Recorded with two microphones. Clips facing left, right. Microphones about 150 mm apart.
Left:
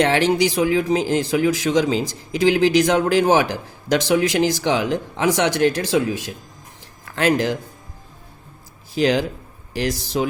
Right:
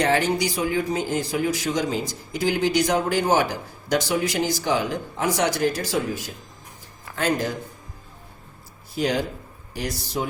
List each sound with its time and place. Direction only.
0.0 s a man's voice: 90° left
9.0 s a man's voice: 90° left